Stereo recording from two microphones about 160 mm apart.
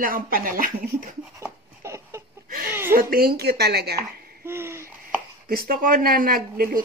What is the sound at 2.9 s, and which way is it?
Speech, 70° right (ahead or behind).